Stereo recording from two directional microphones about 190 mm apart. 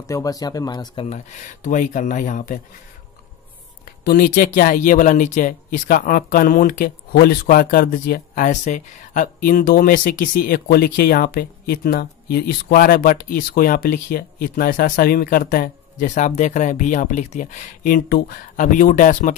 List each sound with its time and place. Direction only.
0.0 s speech: 15° left (ahead or behind)
1.0 s speech: 40° left (ahead or behind)
3.8 s speech: 50° left (ahead or behind)